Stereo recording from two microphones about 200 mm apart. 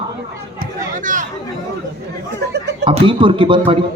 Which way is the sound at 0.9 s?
40° right (ahead or behind).